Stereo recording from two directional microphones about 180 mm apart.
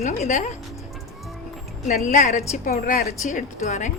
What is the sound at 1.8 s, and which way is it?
Speech, 40° left (ahead or behind).